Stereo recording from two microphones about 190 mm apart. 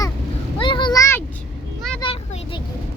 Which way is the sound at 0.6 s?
25° left (ahead or behind).